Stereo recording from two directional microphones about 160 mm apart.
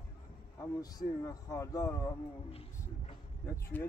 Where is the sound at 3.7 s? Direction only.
10° left (ahead or behind).